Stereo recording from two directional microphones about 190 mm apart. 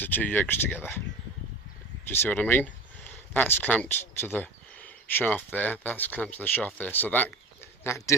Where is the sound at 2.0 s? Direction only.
10° left (ahead or behind).